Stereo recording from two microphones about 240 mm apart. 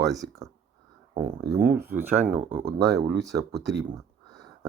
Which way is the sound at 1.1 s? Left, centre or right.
Right.